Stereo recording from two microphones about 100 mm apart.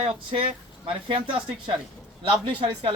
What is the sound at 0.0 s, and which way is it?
Speech, 65° right (ahead or behind).